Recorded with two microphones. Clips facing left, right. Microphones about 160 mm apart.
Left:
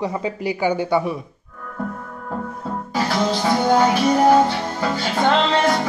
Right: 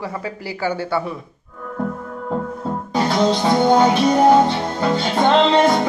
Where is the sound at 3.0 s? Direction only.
25° right (ahead or behind).